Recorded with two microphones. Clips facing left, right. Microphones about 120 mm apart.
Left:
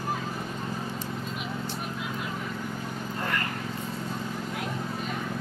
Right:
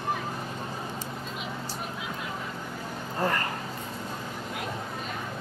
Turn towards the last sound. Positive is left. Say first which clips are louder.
# right 3 dB
turn(degrees=-35)  # may be behind; listen again after turning